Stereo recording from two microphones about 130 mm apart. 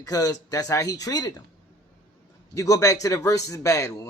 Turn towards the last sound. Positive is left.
turn(degrees=25)  # may be behind; listen again after turning